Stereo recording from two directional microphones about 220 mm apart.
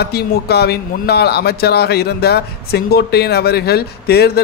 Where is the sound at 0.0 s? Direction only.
45° left (ahead or behind).